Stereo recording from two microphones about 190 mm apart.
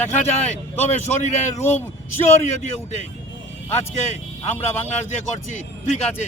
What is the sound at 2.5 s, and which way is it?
Speech, 40° left (ahead or behind).